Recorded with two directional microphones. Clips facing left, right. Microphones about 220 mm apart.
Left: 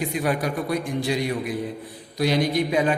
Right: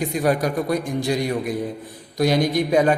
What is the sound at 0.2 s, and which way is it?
A man's voice, 40° right (ahead or behind).